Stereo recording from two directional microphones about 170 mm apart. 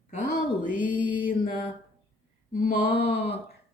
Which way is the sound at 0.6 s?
50° left (ahead or behind).